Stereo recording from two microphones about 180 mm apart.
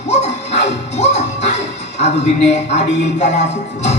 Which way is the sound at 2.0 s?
40° left (ahead or behind).